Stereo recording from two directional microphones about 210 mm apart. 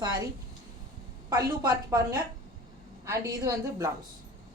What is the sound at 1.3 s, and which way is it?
A woman's voice, 20° right (ahead or behind).